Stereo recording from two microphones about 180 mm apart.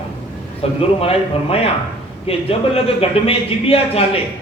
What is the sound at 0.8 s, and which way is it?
A man's voice, 30° left (ahead or behind).